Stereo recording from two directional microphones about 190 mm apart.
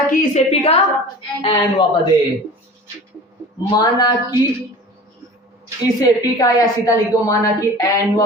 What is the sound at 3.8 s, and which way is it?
Speech, 20° left (ahead or behind).